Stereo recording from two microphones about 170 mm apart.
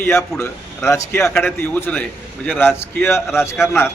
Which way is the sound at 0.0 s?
15° left (ahead or behind).